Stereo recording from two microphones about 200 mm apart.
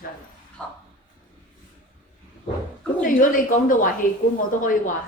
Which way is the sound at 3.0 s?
45° left (ahead or behind).